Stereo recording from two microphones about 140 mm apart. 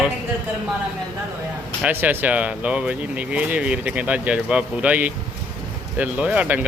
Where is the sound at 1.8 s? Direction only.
15° right (ahead or behind).